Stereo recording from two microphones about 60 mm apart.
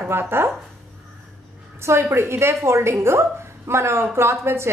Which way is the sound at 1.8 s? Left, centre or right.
Right.